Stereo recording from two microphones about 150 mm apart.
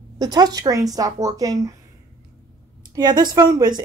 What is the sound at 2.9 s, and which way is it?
Speech, 30° right (ahead or behind).